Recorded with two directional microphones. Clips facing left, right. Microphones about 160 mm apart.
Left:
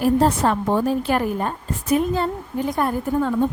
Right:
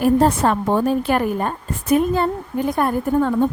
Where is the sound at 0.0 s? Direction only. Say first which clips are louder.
Right 2 dB; 55° right (ahead or behind).